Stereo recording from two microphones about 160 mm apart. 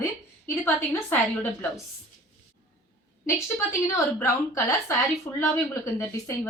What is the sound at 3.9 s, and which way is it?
A woman's voice, 15° left (ahead or behind).